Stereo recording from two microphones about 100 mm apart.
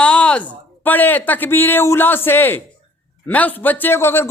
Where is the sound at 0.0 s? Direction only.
10° left (ahead or behind).